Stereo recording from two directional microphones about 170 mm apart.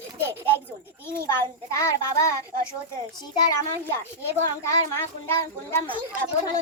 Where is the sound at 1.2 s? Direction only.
20° left (ahead or behind).